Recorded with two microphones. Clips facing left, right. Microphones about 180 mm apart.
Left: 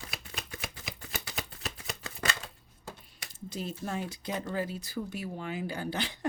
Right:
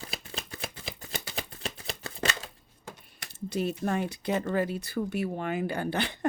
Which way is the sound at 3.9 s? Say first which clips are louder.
Right 6 dB; 65° right (ahead or behind).